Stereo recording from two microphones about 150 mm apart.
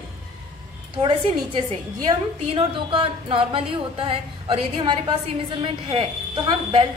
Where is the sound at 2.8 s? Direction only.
35° right (ahead or behind).